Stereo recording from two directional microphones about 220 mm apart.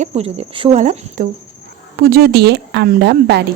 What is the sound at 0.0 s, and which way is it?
Speech, 30° right (ahead or behind).